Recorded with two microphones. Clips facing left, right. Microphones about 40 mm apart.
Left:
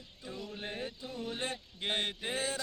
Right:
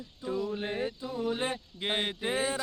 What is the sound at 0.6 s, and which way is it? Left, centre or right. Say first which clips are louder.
Speech: right 7 dB; right.